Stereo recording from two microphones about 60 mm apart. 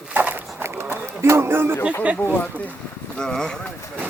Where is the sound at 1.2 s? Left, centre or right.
Right.